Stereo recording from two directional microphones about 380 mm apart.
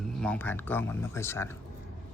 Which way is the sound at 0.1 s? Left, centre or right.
Centre.